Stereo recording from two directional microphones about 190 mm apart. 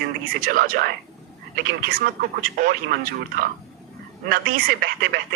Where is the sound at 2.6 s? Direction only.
50° right (ahead or behind).